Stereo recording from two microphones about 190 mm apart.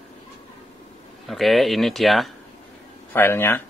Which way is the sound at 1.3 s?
Centre (ahead or behind).